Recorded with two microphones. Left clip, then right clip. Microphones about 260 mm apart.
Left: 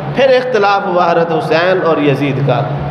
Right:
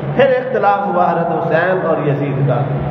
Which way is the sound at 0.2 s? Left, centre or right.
Left.